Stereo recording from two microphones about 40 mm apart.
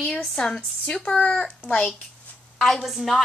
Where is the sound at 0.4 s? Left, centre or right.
Left.